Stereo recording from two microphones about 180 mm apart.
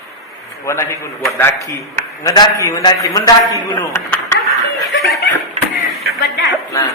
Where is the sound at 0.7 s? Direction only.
15° left (ahead or behind).